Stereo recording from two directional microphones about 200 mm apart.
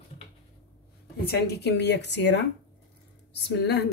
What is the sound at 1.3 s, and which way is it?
Speech, 55° left (ahead or behind).